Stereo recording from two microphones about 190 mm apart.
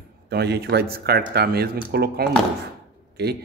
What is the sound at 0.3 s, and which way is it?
Speech, 60° right (ahead or behind).